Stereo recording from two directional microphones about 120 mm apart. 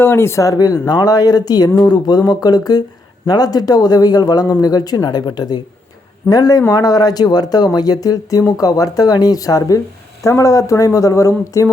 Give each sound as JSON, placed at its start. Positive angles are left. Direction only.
{"t": 0.0, "sound": "speech", "side_deg": 20}